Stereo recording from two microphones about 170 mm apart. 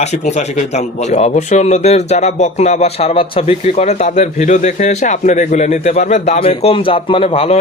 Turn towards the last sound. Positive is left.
turn(degrees=35)  # may be behind; listen again after turning